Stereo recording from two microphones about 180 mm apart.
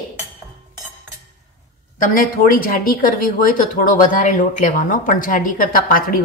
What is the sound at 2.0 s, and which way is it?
Speech, 50° left (ahead or behind).